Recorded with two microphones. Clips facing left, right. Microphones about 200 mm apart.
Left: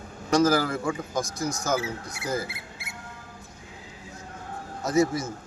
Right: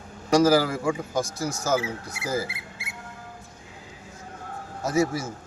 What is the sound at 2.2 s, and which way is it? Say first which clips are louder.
Speech: right 2 dB; 10° right (ahead or behind).